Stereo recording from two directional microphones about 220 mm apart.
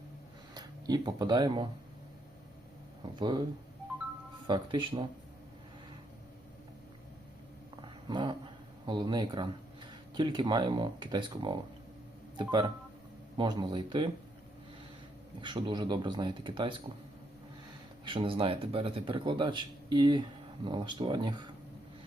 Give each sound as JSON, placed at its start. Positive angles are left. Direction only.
{"t": 0.5, "sound": "speech", "side_deg": -20}
{"t": 3.2, "sound": "a man's voice", "side_deg": -20}
{"t": 4.4, "sound": "a man's voice", "side_deg": -20}
{"t": 7.8, "sound": "a sound", "side_deg": -20}
{"t": 8.9, "sound": "a man's voice", "side_deg": -20}
{"t": 15.4, "sound": "a man's voice", "side_deg": -20}
{"t": 18.0, "sound": "a man's voice", "side_deg": -25}